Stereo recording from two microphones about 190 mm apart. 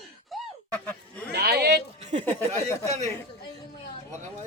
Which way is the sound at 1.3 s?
55° right (ahead or behind).